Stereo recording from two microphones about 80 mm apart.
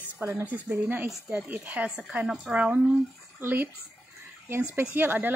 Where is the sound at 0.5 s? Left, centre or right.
Right.